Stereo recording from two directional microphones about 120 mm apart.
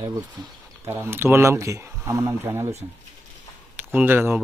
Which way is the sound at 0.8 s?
20° right (ahead or behind).